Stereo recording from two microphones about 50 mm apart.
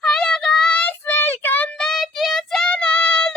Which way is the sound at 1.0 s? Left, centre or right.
Left.